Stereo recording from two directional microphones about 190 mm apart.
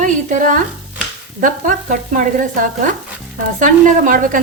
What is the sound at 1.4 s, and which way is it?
Stir, 45° right (ahead or behind).